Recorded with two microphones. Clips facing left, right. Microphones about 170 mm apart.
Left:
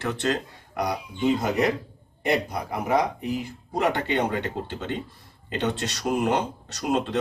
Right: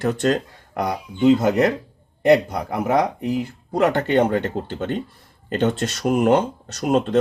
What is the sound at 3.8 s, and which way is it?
Speech, 45° right (ahead or behind).